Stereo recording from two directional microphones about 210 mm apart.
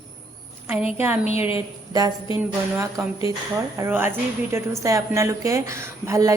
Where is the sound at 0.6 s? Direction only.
10° right (ahead or behind).